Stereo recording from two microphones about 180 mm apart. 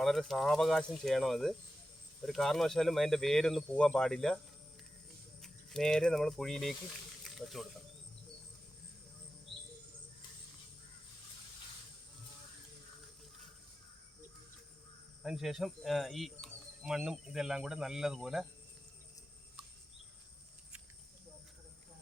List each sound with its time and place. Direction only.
0.0 s speech: centre (ahead or behind)
5.4 s speech: centre (ahead or behind)
15.2 s speech: centre (ahead or behind)